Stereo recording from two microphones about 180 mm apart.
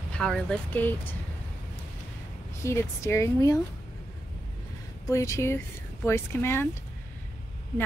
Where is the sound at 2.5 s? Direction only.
15° left (ahead or behind).